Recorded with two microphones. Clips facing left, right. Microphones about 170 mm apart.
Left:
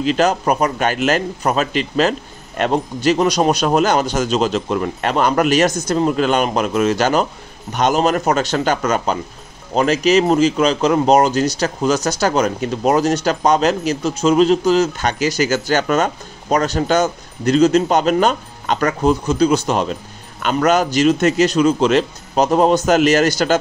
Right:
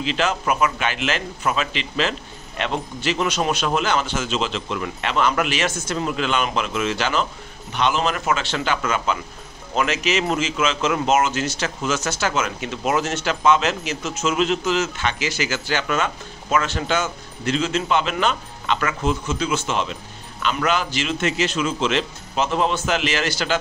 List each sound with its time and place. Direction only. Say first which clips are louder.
0.0 s a man's voice: left 7 dB; 40° left (ahead or behind)